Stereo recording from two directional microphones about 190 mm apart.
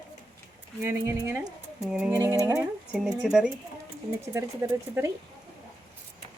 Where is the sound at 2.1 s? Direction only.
15° right (ahead or behind).